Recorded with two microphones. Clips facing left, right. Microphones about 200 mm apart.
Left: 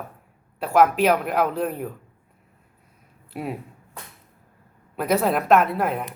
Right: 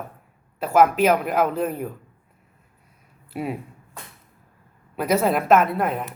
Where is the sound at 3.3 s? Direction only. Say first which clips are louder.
Right 2 dB; centre (ahead or behind).